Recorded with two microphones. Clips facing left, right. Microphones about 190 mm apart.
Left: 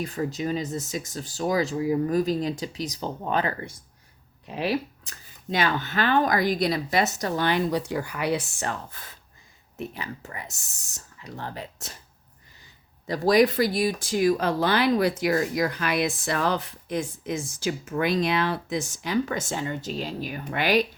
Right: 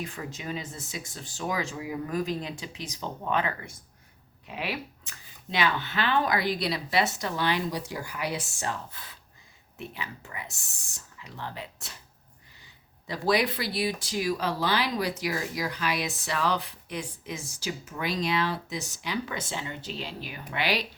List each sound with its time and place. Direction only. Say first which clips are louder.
0.0 s speech: left 8 dB; 40° left (ahead or behind)
13.1 s speech: left 6 dB; 45° left (ahead or behind)